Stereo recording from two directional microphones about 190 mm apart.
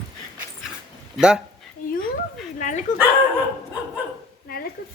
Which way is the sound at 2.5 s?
40° left (ahead or behind).